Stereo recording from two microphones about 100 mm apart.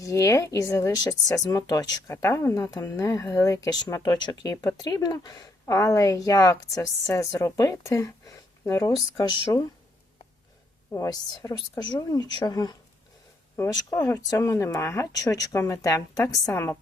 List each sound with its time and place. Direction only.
0.0 s speech: 30° left (ahead or behind)
2.6 s speech: 40° left (ahead or behind)
2.9 s speech: 30° left (ahead or behind)
10.9 s speech: 35° left (ahead or behind)
13.9 s a woman's voice: 35° left (ahead or behind)